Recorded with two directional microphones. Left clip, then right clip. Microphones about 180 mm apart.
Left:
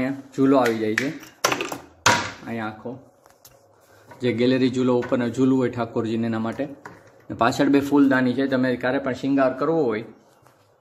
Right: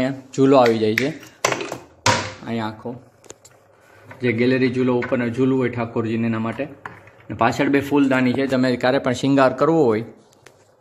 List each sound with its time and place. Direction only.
0.0 s speech: 15° right (ahead or behind)
2.4 s speech: 20° right (ahead or behind)
4.2 s speech: 5° right (ahead or behind); by 10.0 s 40° right (ahead or behind)